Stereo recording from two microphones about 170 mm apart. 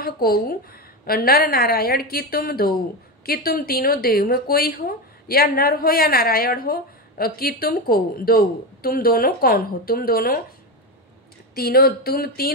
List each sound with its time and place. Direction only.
0.0 s speech: 60° left (ahead or behind)
11.5 s speech: 60° left (ahead or behind)